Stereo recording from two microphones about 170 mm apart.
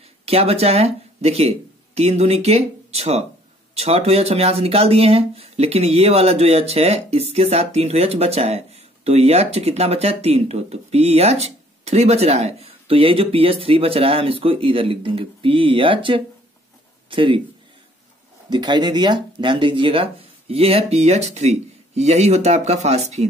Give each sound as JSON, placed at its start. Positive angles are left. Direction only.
{"t": 0.2, "sound": "a man's voice", "side_deg": -35}
{"t": 18.5, "sound": "speech", "side_deg": -25}